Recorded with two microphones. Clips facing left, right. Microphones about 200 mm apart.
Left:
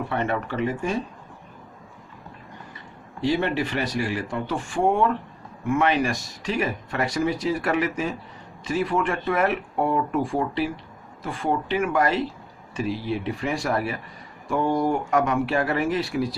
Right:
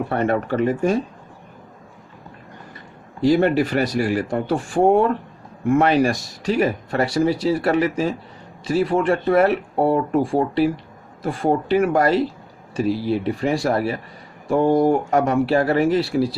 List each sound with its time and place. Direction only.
0.1 s speech: 40° right (ahead or behind)
3.2 s speech: 40° right (ahead or behind)